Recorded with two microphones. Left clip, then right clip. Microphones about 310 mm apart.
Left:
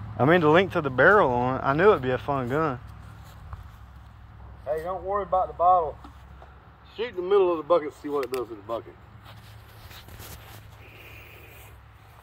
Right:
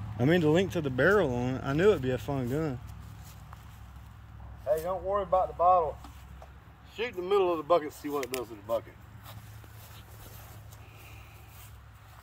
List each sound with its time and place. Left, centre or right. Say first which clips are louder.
0.2 s speech: left 7 dB; centre
4.6 s speech: left 1 dB; right